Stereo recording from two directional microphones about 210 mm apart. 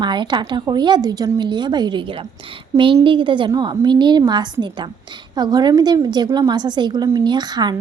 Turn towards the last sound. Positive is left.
turn(degrees=-20)  # may be behind; listen again after turning